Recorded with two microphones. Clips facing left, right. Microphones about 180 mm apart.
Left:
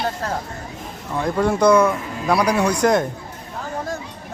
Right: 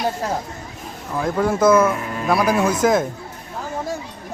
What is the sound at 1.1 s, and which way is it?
Speech, 5° right (ahead or behind).